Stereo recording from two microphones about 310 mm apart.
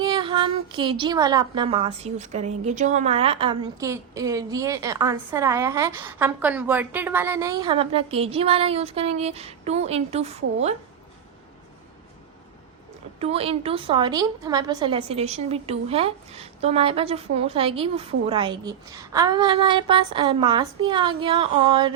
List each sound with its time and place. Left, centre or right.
0.0 s a woman's voice: centre
13.1 s a woman's voice: centre